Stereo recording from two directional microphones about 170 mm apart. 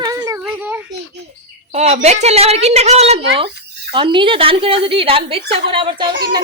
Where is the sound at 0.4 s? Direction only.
10° right (ahead or behind).